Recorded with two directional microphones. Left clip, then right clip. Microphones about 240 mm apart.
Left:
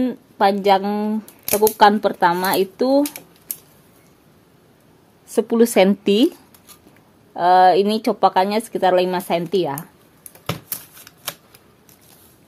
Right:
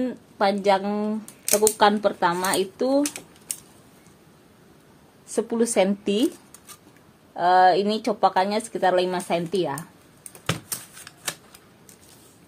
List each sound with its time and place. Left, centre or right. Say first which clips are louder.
0.0 s speech: left 5 dB; left
5.3 s speech: left 7 dB; left
7.3 s speech: left 4 dB; left
10.7 s typewriter: right 1 dB; centre